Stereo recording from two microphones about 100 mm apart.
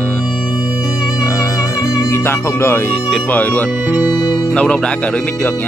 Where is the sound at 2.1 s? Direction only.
25° left (ahead or behind).